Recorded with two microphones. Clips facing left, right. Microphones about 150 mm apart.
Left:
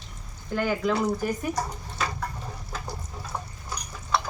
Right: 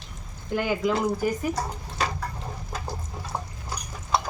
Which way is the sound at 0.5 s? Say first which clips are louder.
Right 1 dB; 15° right (ahead or behind).